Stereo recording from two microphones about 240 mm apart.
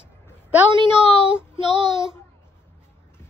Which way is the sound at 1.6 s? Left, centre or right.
Centre.